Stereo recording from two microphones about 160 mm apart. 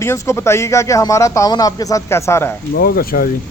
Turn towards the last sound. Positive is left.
turn(degrees=70)  # may be behind; listen again after turning